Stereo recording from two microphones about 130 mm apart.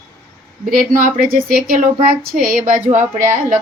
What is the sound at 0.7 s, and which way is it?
A woman's voice, 90° right.